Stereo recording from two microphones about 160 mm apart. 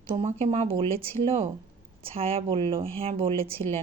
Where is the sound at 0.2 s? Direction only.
40° right (ahead or behind).